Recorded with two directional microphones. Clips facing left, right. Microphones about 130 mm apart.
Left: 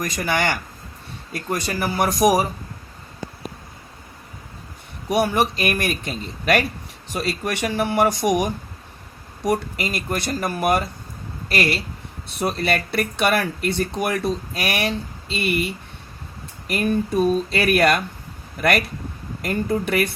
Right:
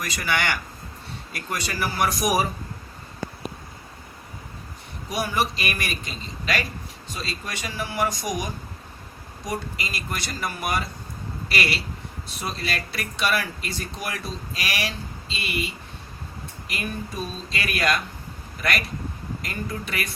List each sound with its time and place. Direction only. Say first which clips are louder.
0.0 s a man's voice: left 4 dB; 45° left (ahead or behind)
5.0 s a man's voice: left 6 dB; 55° left (ahead or behind)
16.6 s speech: left 11 dB; 50° left (ahead or behind)
19.4 s a man's voice: left 11 dB; 55° left (ahead or behind)